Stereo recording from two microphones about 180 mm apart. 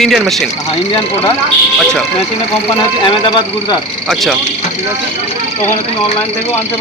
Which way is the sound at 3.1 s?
25° left (ahead or behind).